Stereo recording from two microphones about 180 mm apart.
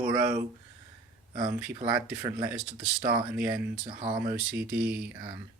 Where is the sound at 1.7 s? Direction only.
15° right (ahead or behind).